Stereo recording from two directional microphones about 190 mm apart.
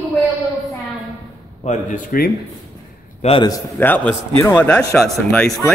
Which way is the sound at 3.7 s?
10° left (ahead or behind).